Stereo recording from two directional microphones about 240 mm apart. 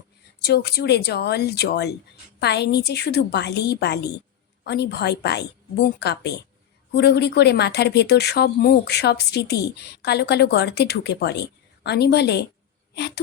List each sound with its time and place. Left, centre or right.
0.4 s speech: left